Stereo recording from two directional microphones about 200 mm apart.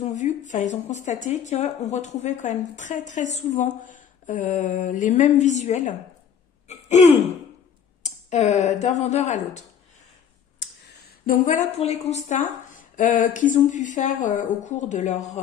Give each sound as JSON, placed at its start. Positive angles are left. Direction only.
{"t": 0.0, "sound": "speech", "side_deg": 35}
{"t": 8.0, "sound": "speech", "side_deg": 35}
{"t": 11.2, "sound": "speech", "side_deg": 40}